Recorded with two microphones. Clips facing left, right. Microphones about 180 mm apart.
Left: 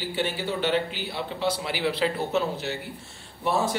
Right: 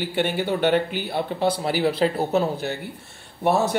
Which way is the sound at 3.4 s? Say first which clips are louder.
Right 5 dB; 65° right (ahead or behind).